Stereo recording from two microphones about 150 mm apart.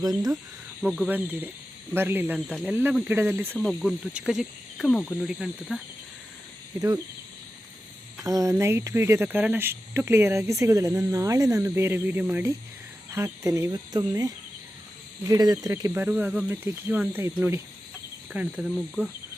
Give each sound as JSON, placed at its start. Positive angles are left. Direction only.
{"t": 0.0, "sound": "speech", "side_deg": -25}
{"t": 0.8, "sound": "speech", "side_deg": -5}
{"t": 3.7, "sound": "speech", "side_deg": -5}
{"t": 8.2, "sound": "speech", "side_deg": -20}
{"t": 18.3, "sound": "speech", "side_deg": -5}